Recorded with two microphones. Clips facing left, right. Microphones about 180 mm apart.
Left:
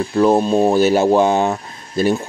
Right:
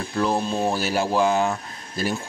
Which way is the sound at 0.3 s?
35° left (ahead or behind).